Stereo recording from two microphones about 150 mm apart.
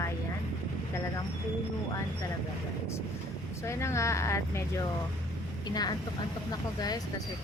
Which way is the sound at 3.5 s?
20° left (ahead or behind).